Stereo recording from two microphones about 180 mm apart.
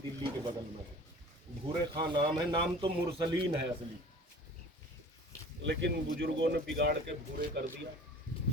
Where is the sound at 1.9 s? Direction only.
25° right (ahead or behind).